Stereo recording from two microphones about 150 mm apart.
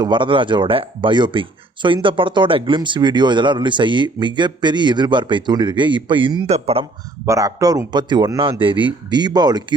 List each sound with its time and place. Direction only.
0.0 s speech: 30° right (ahead or behind)
7.3 s a man's voice: 20° right (ahead or behind)